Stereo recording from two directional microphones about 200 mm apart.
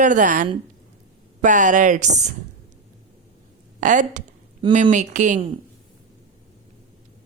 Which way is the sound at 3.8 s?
40° right (ahead or behind).